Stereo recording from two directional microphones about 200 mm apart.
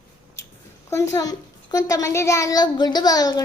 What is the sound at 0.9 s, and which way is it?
A child's voice, 15° left (ahead or behind).